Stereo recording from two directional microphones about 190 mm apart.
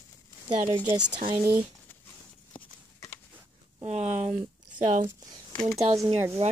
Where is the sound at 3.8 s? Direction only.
40° right (ahead or behind).